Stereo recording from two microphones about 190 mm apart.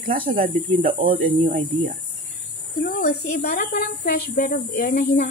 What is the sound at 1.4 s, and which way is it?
Speech, 45° right (ahead or behind).